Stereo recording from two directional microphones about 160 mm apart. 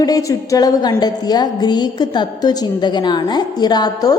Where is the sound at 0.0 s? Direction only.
20° left (ahead or behind).